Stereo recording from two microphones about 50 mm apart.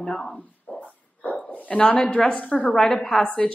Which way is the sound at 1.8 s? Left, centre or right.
Left.